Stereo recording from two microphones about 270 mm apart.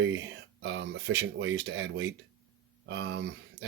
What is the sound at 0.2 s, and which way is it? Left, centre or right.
Speech, right.